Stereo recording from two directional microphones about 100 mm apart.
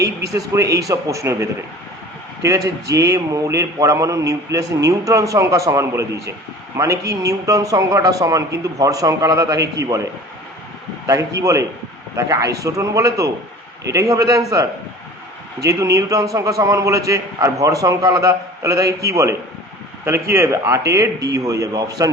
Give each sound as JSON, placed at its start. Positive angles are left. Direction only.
{"t": 0.0, "sound": "a man's voice", "side_deg": -35}